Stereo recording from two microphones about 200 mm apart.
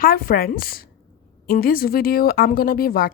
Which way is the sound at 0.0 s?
45° left (ahead or behind).